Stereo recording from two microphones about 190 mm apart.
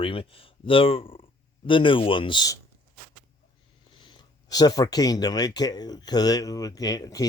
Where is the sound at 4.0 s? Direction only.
25° left (ahead or behind).